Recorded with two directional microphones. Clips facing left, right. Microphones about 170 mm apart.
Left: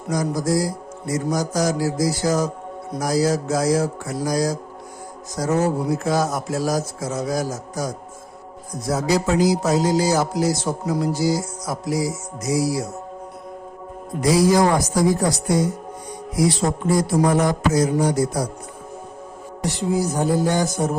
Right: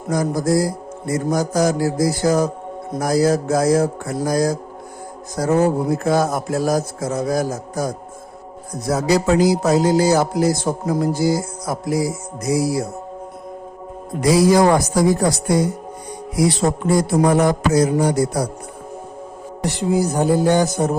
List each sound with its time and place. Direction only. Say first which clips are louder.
0.1 s music: right 3 dB; 55° right (ahead or behind)
8.9 s music: right 3 dB; 65° right (ahead or behind)
14.2 s music: right 3 dB; 65° right (ahead or behind)
19.9 s music: right 3 dB; 60° right (ahead or behind)